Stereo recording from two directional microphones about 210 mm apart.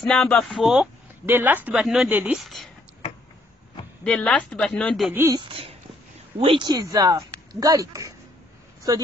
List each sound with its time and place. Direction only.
0.0 s speech: centre (ahead or behind)
4.0 s speech: 5° left (ahead or behind)
5.1 s speech: 10° right (ahead or behind)
5.5 s a sound: 25° right (ahead or behind)
6.3 s speech: 25° right (ahead or behind)